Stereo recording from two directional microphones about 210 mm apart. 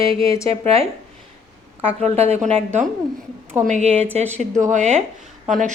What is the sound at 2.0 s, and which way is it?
Speech, 30° right (ahead or behind).